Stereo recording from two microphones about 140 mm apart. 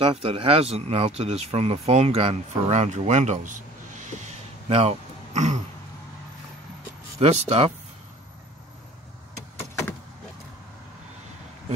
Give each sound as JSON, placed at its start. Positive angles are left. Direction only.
{"t": 0.0, "sound": "speech", "side_deg": -45}
{"t": 7.2, "sound": "speech", "side_deg": -45}